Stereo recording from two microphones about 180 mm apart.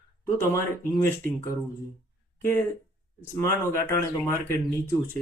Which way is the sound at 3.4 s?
15° left (ahead or behind).